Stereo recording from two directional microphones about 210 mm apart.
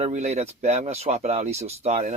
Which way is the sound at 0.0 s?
35° right (ahead or behind).